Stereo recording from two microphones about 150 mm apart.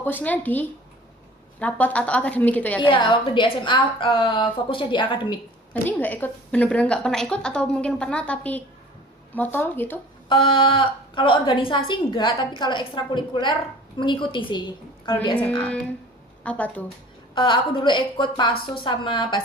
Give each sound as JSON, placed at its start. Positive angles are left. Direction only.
{"t": 0.0, "sound": "a woman's voice", "side_deg": 10}
{"t": 2.8, "sound": "a woman's voice", "side_deg": 30}
{"t": 5.7, "sound": "a woman's voice", "side_deg": 10}
{"t": 10.2, "sound": "a woman's voice", "side_deg": 35}
{"t": 16.4, "sound": "a woman's voice", "side_deg": 10}
{"t": 17.3, "sound": "a woman's voice", "side_deg": 35}